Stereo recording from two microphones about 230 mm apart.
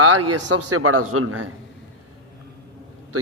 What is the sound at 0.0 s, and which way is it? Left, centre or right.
Speech, right.